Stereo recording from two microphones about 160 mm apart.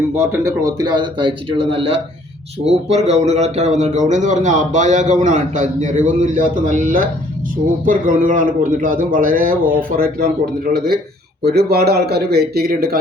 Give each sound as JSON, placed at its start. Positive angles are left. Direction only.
{"t": 0.2, "sound": "a man's voice", "side_deg": -15}
{"t": 11.4, "sound": "speech", "side_deg": -85}